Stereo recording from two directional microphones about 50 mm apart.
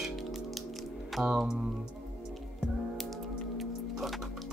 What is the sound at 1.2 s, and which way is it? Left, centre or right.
Music, centre.